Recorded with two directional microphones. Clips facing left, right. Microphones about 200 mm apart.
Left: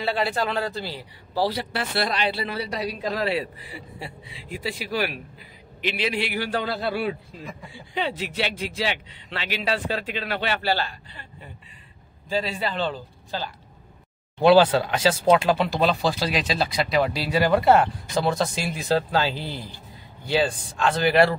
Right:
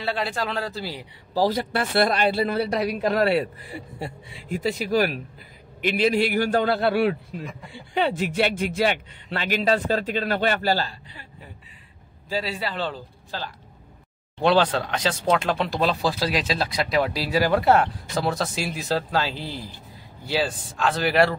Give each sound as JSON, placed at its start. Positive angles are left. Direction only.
{"t": 0.0, "sound": "speech", "side_deg": 0}
{"t": 1.3, "sound": "speech", "side_deg": -45}
{"t": 7.9, "sound": "speech", "side_deg": -50}
{"t": 12.3, "sound": "speech", "side_deg": -5}